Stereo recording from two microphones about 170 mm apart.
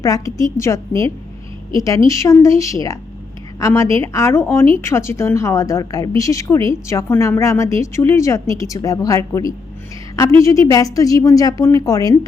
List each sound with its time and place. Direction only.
0.0 s a woman's voice: 20° left (ahead or behind)